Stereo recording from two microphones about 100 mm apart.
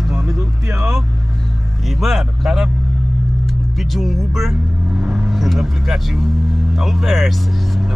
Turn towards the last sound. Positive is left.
turn(degrees=0)  # may be behind; listen again after turning